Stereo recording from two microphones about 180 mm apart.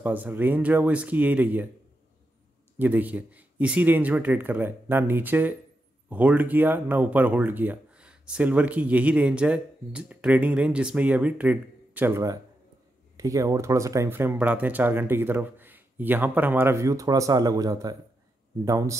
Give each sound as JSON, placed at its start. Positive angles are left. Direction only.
{"t": 0.0, "sound": "speech", "side_deg": -10}
{"t": 2.8, "sound": "speech", "side_deg": -10}